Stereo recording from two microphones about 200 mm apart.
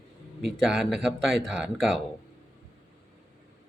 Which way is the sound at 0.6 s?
Centre (ahead or behind).